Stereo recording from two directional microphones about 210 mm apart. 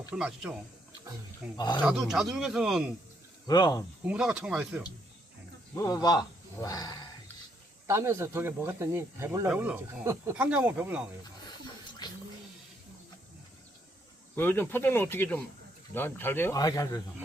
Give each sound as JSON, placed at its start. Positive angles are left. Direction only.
{"t": 0.1, "sound": "speech", "side_deg": -5}
{"t": 1.5, "sound": "speech", "side_deg": 20}
{"t": 1.8, "sound": "speech", "side_deg": -5}
{"t": 3.4, "sound": "speech", "side_deg": 20}
{"t": 4.0, "sound": "speech", "side_deg": -5}
{"t": 5.7, "sound": "a man's voice", "side_deg": 15}
{"t": 7.9, "sound": "speech", "side_deg": -15}
{"t": 11.4, "sound": "a sound", "side_deg": 20}
{"t": 14.3, "sound": "a man's voice", "side_deg": 10}